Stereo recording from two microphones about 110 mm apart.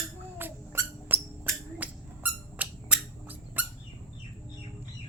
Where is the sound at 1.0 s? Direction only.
20° right (ahead or behind).